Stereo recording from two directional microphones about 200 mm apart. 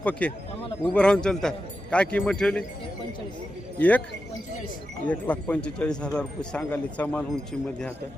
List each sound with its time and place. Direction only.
0.0 s a man's voice: 5° left (ahead or behind)
3.8 s speech: 5° left (ahead or behind)
5.0 s speech: 5° left (ahead or behind)